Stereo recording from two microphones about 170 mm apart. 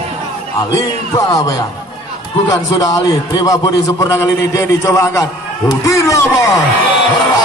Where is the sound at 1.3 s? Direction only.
20° left (ahead or behind).